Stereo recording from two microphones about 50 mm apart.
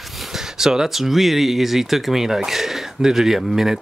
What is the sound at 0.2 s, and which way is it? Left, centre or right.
Speech, centre.